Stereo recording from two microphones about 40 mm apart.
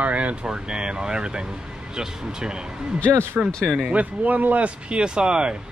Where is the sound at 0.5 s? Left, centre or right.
Centre.